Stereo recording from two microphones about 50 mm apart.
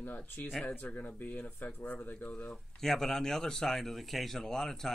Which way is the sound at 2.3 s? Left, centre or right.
Left.